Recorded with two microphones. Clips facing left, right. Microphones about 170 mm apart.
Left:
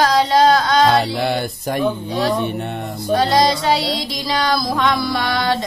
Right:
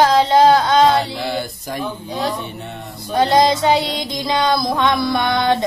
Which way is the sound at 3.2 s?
20° right (ahead or behind).